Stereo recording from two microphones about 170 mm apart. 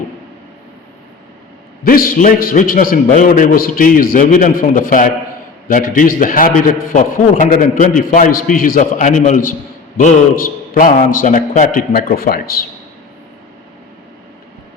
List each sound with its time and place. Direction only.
1.8 s a man's voice: 55° left (ahead or behind)